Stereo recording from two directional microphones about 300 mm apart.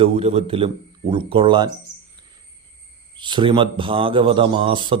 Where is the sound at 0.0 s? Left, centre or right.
Centre.